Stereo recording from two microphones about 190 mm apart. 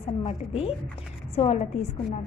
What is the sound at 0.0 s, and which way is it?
A woman's voice, 30° left (ahead or behind).